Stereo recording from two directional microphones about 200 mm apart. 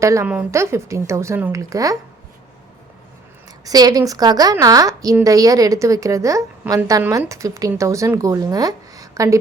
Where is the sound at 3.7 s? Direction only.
20° right (ahead or behind).